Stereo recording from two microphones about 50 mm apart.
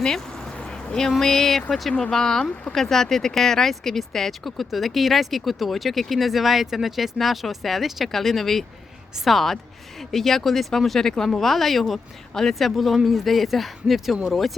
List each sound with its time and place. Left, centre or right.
0.6 s a sound: left
1.2 s speech: centre
1.9 s speech: centre